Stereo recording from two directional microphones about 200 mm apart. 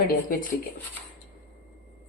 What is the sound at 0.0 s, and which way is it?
Speech, 45° left (ahead or behind).